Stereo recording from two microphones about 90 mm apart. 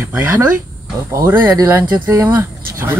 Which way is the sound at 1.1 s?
35° right (ahead or behind).